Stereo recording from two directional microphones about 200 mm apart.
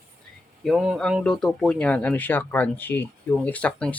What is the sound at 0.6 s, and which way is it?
Speech, 5° right (ahead or behind).